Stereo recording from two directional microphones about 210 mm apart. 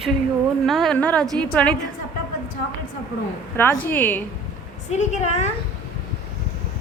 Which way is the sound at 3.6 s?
10° left (ahead or behind).